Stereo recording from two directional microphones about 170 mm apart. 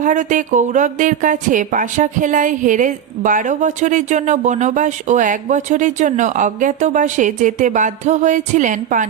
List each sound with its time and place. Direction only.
0.0 s speech: 50° right (ahead or behind)